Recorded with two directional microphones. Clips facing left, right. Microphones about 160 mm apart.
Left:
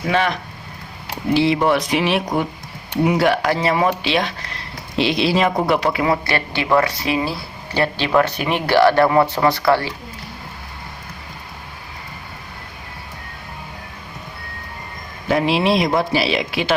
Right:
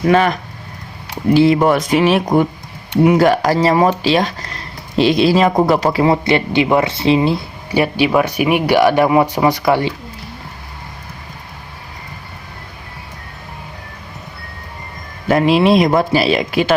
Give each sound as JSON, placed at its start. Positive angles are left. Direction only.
{"t": 0.1, "sound": "speech", "side_deg": -45}
{"t": 6.2, "sound": "speech", "side_deg": -20}
{"t": 15.3, "sound": "speech", "side_deg": -50}